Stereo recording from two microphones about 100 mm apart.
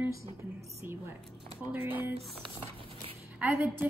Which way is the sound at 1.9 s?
20° right (ahead or behind).